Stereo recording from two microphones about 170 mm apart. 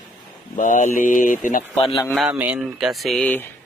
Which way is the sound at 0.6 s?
50° left (ahead or behind).